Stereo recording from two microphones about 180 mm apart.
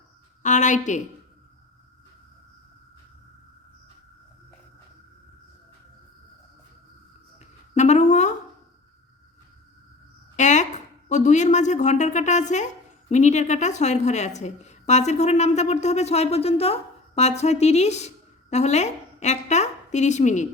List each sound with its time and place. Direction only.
0.4 s a woman's voice: 45° left (ahead or behind)
7.3 s a sound: 40° left (ahead or behind)
10.3 s a woman's voice: 40° left (ahead or behind)